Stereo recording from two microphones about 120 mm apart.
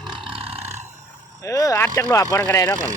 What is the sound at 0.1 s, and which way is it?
Roar, 50° right (ahead or behind).